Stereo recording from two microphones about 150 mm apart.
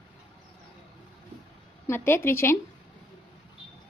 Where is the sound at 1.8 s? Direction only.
15° left (ahead or behind).